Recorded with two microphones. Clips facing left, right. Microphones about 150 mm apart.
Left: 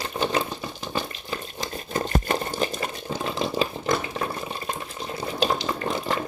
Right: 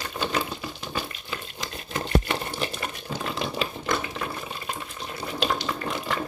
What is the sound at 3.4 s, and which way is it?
Water, 35° left (ahead or behind).